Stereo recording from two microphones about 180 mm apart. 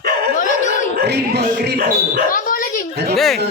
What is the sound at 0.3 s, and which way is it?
Dog, 45° left (ahead or behind).